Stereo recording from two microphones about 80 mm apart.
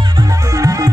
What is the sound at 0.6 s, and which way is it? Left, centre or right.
Music, right.